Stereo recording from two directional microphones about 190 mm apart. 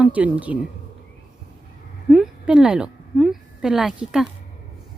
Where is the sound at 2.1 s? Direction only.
5° right (ahead or behind).